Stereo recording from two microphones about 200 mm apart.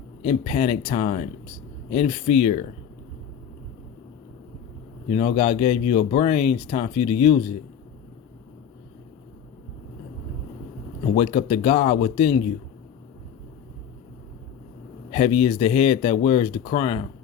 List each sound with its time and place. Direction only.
0.2 s speech: 30° left (ahead or behind)
5.0 s speech: 30° left (ahead or behind)
11.2 s speech: 30° left (ahead or behind)
15.1 s speech: 25° left (ahead or behind)